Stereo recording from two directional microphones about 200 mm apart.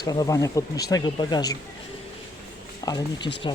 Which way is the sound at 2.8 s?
20° left (ahead or behind).